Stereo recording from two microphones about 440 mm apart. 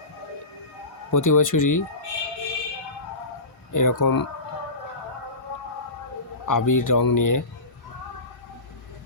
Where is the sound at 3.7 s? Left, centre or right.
Left.